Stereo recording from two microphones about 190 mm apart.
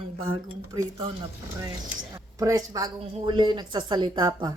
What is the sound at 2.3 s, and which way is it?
A woman's voice, 20° right (ahead or behind).